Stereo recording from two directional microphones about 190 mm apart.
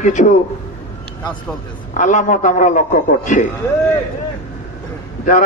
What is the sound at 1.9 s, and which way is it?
A man's voice, 40° left (ahead or behind).